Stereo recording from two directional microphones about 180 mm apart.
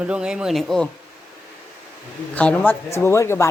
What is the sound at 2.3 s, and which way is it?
Speech, 5° left (ahead or behind).